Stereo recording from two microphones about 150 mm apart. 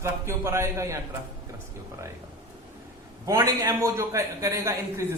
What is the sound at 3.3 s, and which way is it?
A man's voice, 25° right (ahead or behind).